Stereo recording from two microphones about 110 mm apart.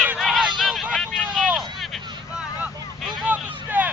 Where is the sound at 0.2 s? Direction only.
Centre (ahead or behind).